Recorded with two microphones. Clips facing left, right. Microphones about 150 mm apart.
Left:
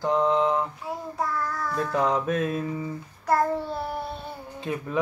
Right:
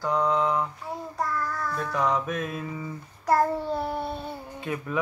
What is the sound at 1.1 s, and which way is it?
Child singing, 5° left (ahead or behind).